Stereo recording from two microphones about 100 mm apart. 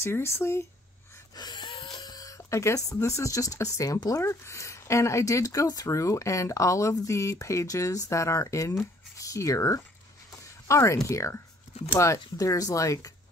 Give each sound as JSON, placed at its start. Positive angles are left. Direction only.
{"t": 0.0, "sound": "speech", "side_deg": 25}
{"t": 1.3, "sound": "dog", "side_deg": 45}
{"t": 2.0, "sound": "speech", "side_deg": 40}